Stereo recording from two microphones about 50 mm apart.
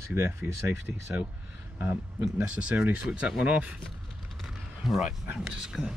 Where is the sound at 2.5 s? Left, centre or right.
Right.